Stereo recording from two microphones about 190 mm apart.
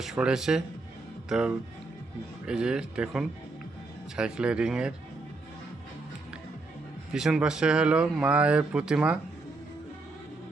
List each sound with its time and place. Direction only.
0.0 s speech: 5° right (ahead or behind)
7.1 s speech: 5° right (ahead or behind)